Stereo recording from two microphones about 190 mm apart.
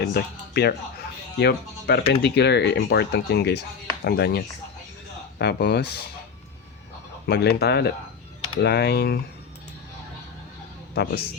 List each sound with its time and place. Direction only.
0.0 s speech: 60° left (ahead or behind)
7.3 s speech: 60° left (ahead or behind)
10.9 s speech: 55° left (ahead or behind)